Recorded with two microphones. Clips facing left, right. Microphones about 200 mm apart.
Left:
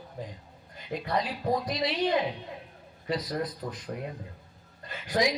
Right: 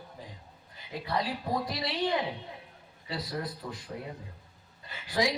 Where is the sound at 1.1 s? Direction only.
20° left (ahead or behind).